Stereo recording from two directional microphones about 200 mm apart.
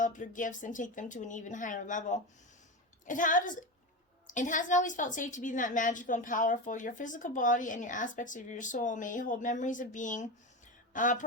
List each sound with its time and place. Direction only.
0.0 s a woman's voice: 40° left (ahead or behind)